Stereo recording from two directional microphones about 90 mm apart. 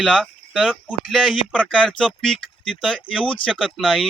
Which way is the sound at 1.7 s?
10° left (ahead or behind).